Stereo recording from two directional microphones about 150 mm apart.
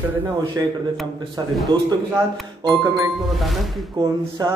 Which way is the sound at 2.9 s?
Centre (ahead or behind).